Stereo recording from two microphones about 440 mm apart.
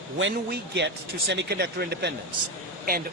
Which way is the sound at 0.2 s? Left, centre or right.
Right.